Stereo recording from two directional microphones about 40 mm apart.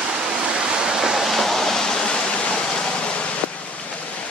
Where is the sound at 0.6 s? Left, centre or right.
Right.